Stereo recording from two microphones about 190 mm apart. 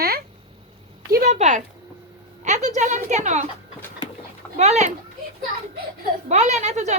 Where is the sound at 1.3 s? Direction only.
40° right (ahead or behind).